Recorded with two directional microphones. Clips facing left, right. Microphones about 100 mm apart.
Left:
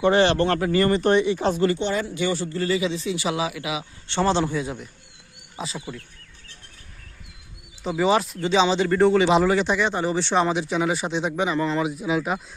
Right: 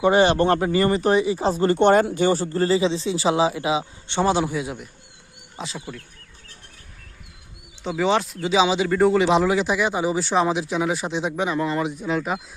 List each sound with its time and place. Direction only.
0.0 s speech: 15° right (ahead or behind)
0.8 s speech: 10° right (ahead or behind)
1.4 s speech: 35° right (ahead or behind)
1.8 s speech: 55° right (ahead or behind); by 4.2 s 25° right (ahead or behind)
4.2 s speech: 10° right (ahead or behind)
7.9 s speech: centre (ahead or behind)